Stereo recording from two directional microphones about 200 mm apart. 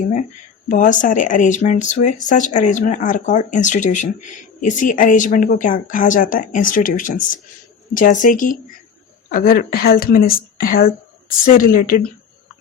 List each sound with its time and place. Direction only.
0.7 s a woman's voice: 40° left (ahead or behind)